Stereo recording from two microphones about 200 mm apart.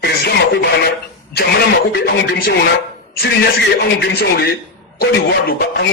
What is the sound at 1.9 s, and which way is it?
A man's voice, 55° left (ahead or behind).